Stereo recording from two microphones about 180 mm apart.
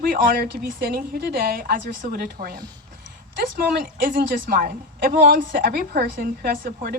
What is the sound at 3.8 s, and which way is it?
A woman's voice, 55° right (ahead or behind).